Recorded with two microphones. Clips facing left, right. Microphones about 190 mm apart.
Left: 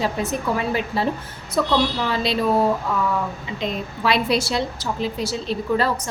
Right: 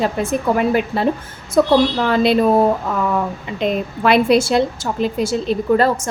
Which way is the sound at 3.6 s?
55° right (ahead or behind).